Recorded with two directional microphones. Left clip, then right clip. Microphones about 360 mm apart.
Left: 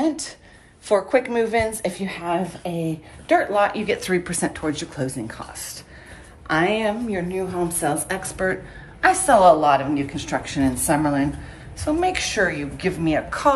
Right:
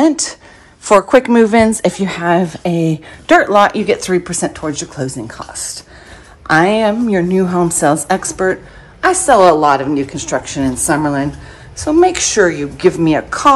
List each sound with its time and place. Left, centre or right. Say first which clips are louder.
0.0 s a woman's voice: right 11 dB; centre